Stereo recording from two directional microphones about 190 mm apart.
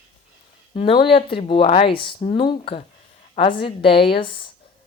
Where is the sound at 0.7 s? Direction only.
30° left (ahead or behind).